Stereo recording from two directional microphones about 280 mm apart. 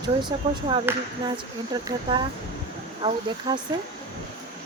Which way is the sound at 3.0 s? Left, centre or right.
Centre.